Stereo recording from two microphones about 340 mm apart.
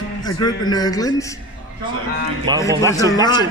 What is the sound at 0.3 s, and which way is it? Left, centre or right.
Speech, centre.